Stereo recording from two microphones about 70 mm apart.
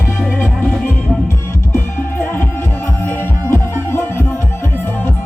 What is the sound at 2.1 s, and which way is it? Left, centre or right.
Music, left.